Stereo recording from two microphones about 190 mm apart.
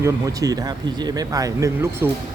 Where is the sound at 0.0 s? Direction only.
20° right (ahead or behind).